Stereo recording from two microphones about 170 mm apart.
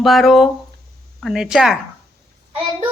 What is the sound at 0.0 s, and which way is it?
Speech, centre (ahead or behind).